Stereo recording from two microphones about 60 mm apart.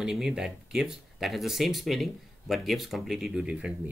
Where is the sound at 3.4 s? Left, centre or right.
Centre.